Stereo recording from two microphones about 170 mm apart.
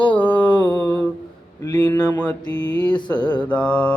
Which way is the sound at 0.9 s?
10° left (ahead or behind).